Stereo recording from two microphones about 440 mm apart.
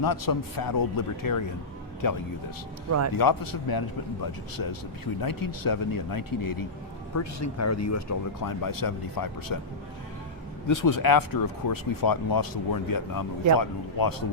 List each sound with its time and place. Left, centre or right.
0.0 s speech: left
7.2 s speech: left
10.7 s speech: left